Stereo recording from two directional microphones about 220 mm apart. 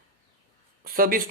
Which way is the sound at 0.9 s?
40° right (ahead or behind).